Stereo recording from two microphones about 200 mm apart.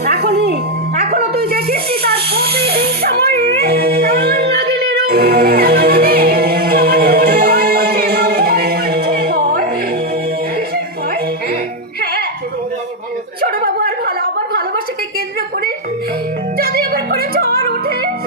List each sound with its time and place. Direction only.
0.0 s music: 50° right (ahead or behind)
13.4 s a sound: 50° right (ahead or behind)
16.6 s music: 50° right (ahead or behind)